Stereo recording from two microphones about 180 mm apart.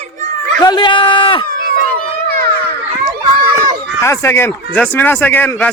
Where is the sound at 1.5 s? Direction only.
60° right (ahead or behind).